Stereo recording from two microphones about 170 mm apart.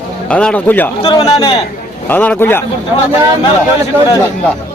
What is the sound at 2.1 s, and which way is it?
Speech, 10° left (ahead or behind).